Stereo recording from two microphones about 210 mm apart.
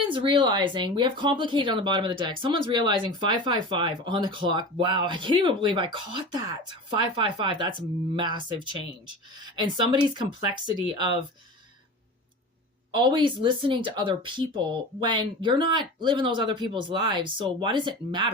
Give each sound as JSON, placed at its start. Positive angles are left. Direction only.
{"t": 0.0, "sound": "speech", "side_deg": -25}
{"t": 12.9, "sound": "speech", "side_deg": -20}